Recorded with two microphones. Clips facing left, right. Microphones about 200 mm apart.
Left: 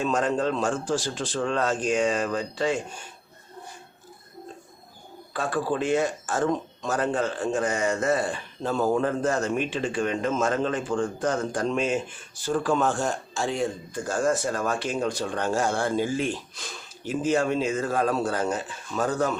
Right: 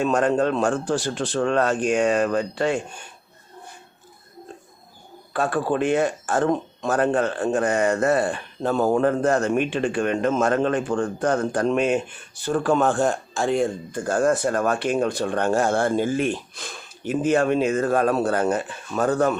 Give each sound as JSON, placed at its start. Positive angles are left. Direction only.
{"t": 0.0, "sound": "speech", "side_deg": -60}
{"t": 5.3, "sound": "speech", "side_deg": -60}